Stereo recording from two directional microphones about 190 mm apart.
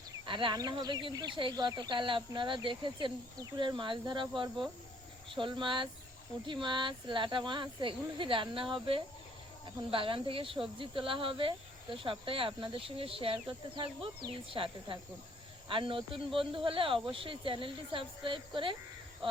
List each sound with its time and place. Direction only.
0.3 s speech: 25° right (ahead or behind)